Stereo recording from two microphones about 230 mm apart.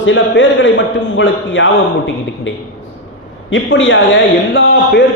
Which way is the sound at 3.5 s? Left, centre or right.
Left.